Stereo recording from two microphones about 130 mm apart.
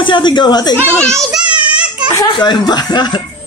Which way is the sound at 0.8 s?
10° left (ahead or behind).